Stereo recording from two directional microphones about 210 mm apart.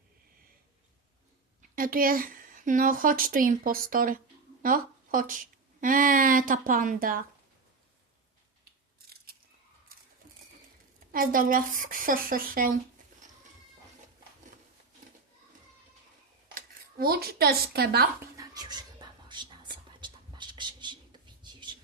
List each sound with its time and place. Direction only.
1.7 s speech: 40° right (ahead or behind)
9.9 s coin: 45° right (ahead or behind)
11.1 s speech: 40° right (ahead or behind)
16.6 s speech: 45° right (ahead or behind)
18.3 s a sound: 20° right (ahead or behind)
20.0 s a sound: 20° right (ahead or behind)